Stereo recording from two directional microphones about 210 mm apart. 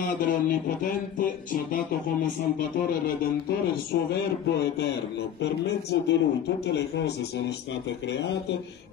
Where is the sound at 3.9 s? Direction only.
55° left (ahead or behind).